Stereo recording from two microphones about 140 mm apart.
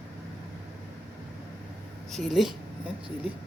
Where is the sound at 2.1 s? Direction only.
Centre (ahead or behind).